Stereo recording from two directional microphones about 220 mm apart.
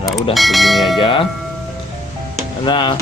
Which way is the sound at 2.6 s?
20° left (ahead or behind).